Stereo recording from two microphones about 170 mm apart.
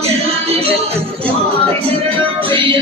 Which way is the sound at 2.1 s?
30° right (ahead or behind).